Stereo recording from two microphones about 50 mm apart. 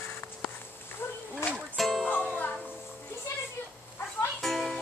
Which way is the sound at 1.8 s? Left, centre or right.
Centre.